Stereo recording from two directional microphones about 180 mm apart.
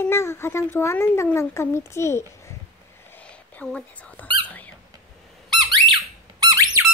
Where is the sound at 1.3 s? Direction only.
15° left (ahead or behind).